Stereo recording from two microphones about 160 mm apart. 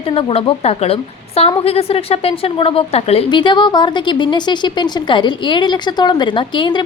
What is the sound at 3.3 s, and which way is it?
A woman's voice, 30° left (ahead or behind).